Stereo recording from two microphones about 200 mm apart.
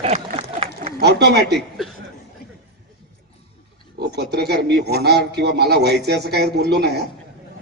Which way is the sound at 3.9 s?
55° right (ahead or behind).